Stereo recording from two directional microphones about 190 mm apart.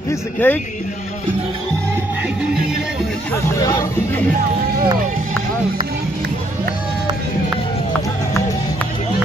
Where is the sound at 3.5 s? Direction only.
15° left (ahead or behind).